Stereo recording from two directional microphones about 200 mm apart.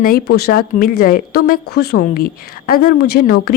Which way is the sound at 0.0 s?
50° left (ahead or behind).